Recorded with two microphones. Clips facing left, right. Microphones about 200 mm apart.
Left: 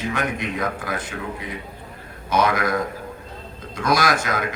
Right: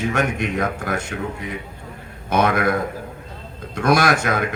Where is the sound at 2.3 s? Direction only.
55° right (ahead or behind).